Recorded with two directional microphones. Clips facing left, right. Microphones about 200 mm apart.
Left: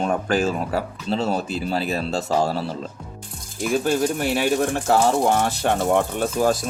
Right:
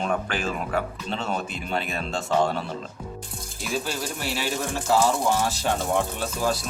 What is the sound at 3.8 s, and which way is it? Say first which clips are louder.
Speech: left 10 dB; 50° left (ahead or behind).